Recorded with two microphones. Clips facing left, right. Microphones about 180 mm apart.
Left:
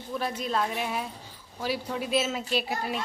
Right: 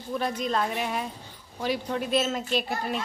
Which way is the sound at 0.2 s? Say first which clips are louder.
Right 1 dB; 5° left (ahead or behind).